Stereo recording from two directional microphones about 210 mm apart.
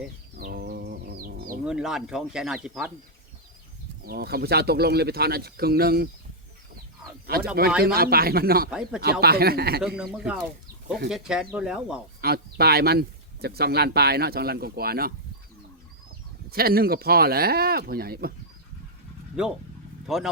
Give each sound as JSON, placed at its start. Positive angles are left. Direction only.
{"t": 0.3, "sound": "music", "side_deg": -45}
{"t": 1.6, "sound": "speech", "side_deg": -5}
{"t": 4.0, "sound": "speech", "side_deg": -45}
{"t": 7.3, "sound": "speech", "side_deg": -45}
{"t": 8.7, "sound": "speech", "side_deg": -5}
{"t": 9.2, "sound": "speech", "side_deg": -45}
{"t": 9.8, "sound": "speech", "side_deg": 0}
{"t": 12.2, "sound": "speech", "side_deg": -50}
{"t": 16.5, "sound": "speech", "side_deg": -45}
{"t": 19.4, "sound": "speech", "side_deg": -5}